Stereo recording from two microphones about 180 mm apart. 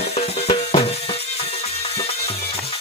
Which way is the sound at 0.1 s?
35° left (ahead or behind).